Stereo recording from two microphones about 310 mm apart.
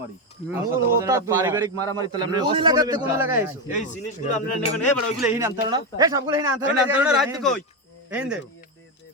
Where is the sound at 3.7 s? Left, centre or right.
Left.